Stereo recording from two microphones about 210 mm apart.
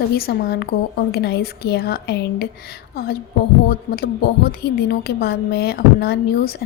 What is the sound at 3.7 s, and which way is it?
A woman's voice, 45° left (ahead or behind).